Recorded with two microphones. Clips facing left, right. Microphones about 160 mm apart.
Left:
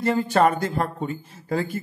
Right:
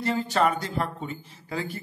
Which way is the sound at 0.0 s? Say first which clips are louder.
Left 5 dB; 50° left (ahead or behind).